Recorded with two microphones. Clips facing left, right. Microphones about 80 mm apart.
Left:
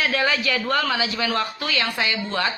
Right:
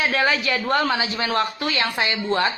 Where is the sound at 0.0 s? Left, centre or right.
Right.